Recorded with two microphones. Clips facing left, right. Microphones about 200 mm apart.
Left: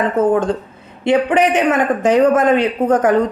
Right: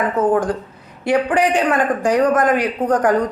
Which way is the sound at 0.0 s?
25° left (ahead or behind).